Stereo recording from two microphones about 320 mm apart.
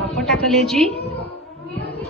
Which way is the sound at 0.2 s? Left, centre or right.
Centre.